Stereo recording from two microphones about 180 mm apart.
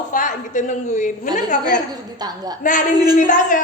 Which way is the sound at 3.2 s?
45° left (ahead or behind).